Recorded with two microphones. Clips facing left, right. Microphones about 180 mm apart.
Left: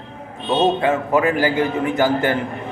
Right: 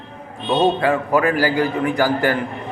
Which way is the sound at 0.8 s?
20° left (ahead or behind).